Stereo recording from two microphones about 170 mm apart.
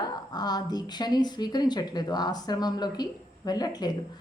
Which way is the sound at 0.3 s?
25° left (ahead or behind).